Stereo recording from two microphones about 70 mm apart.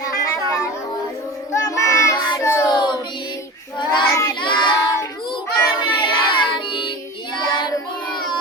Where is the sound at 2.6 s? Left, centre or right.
Left.